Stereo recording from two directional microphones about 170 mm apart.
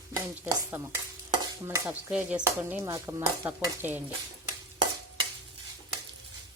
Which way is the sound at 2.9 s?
20° right (ahead or behind).